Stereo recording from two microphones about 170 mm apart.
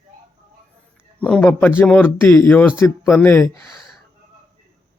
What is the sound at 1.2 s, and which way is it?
Speech, 5° left (ahead or behind).